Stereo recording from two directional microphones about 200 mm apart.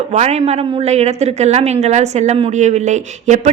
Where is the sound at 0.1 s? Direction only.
35° right (ahead or behind).